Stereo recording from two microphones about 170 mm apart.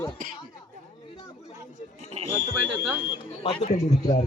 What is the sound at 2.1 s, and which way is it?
Speech, 40° right (ahead or behind).